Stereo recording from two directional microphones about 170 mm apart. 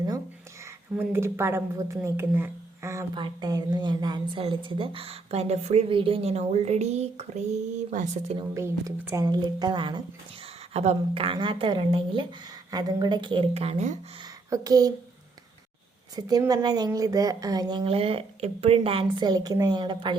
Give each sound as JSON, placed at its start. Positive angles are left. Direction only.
{"t": 0.9, "sound": "a woman's voice", "side_deg": -15}
{"t": 3.2, "sound": "a woman's voice", "side_deg": -25}
{"t": 8.5, "sound": "a woman's voice", "side_deg": -15}
{"t": 14.5, "sound": "a woman's voice", "side_deg": -20}
{"t": 16.1, "sound": "a woman's voice", "side_deg": -20}